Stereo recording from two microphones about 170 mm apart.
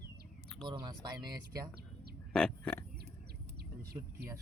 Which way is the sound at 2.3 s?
5° left (ahead or behind).